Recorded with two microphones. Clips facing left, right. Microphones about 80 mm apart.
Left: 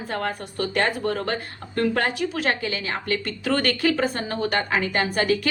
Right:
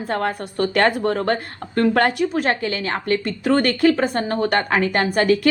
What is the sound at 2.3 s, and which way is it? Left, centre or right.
A woman's voice, right.